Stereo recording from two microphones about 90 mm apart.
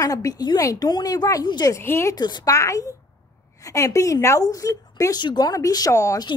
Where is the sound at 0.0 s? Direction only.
40° left (ahead or behind).